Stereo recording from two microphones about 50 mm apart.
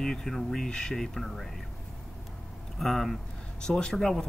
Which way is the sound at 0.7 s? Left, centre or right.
Centre.